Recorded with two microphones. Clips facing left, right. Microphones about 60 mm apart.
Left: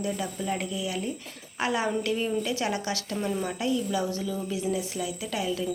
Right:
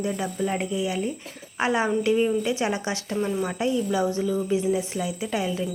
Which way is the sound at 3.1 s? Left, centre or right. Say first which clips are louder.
Right 5 dB; centre.